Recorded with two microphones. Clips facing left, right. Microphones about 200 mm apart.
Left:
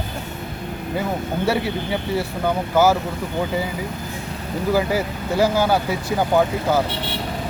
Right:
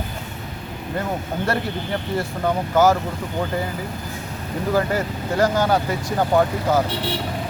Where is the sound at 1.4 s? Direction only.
5° left (ahead or behind).